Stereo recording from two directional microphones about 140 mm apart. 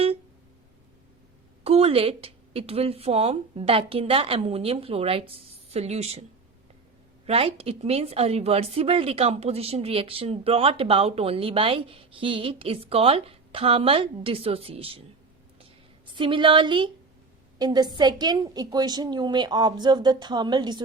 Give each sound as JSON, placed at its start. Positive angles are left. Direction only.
{"t": 1.6, "sound": "a woman's voice", "side_deg": -45}
{"t": 7.3, "sound": "a woman's voice", "side_deg": -45}
{"t": 16.1, "sound": "a woman's voice", "side_deg": -35}